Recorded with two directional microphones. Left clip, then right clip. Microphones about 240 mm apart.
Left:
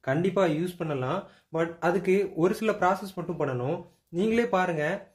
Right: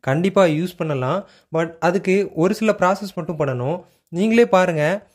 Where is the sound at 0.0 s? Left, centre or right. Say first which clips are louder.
Right 9 dB; right.